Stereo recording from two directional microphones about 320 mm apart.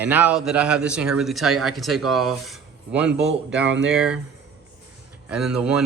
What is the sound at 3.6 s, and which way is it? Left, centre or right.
Speech, right.